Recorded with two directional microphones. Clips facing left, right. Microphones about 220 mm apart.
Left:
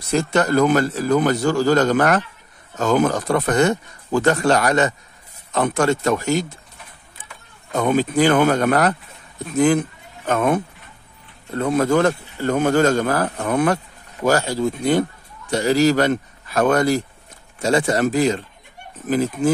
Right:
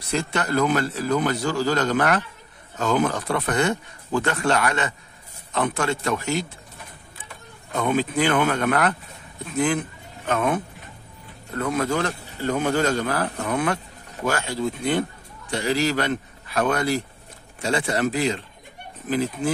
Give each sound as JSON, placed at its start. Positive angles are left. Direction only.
{"t": 0.1, "sound": "speech", "side_deg": 45}
{"t": 7.7, "sound": "speech", "side_deg": 45}
{"t": 10.2, "sound": "speech", "side_deg": 45}
{"t": 11.5, "sound": "speech", "side_deg": 30}
{"t": 11.8, "sound": "speech", "side_deg": 50}